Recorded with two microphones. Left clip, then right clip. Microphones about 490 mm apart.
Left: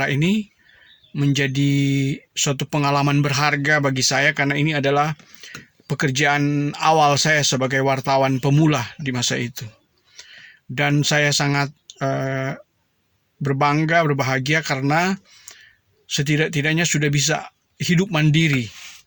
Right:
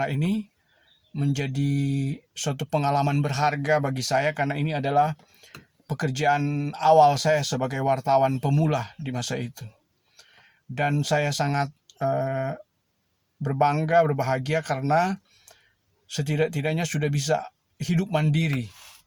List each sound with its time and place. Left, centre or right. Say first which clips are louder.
0.0 s speech: left 7 dB; right
10.8 s speech: left 5 dB; right